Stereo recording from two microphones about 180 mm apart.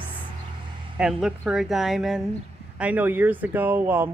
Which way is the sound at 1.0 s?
Centre (ahead or behind).